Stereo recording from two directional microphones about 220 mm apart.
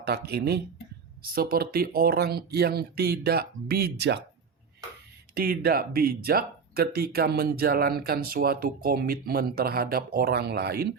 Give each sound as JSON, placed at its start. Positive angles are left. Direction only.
{"t": 0.0, "sound": "speech", "side_deg": -45}
{"t": 5.3, "sound": "speech", "side_deg": -45}